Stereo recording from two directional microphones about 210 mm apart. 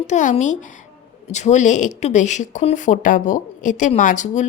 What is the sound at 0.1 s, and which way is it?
Speech, 35° left (ahead or behind).